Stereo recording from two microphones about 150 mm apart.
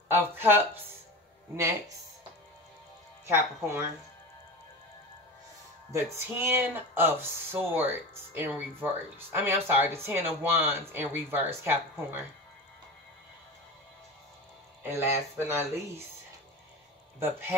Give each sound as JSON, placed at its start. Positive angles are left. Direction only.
{"t": 0.1, "sound": "speech", "side_deg": -15}
{"t": 3.3, "sound": "speech", "side_deg": -15}
{"t": 5.9, "sound": "speech", "side_deg": -15}
{"t": 14.8, "sound": "speech", "side_deg": -15}
{"t": 17.2, "sound": "speech", "side_deg": -15}